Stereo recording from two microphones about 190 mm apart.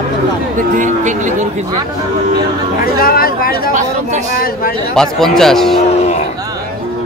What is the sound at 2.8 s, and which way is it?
Speech, 50° left (ahead or behind).